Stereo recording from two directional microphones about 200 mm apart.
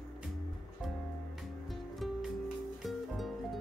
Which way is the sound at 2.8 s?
Centre (ahead or behind).